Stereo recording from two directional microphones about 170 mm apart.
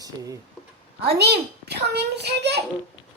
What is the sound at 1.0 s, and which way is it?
A child's voice, 75° right (ahead or behind).